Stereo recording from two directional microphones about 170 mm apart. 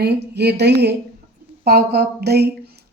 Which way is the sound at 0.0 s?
75° right (ahead or behind).